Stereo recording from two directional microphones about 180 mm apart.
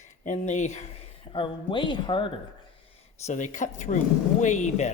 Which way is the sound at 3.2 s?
40° left (ahead or behind).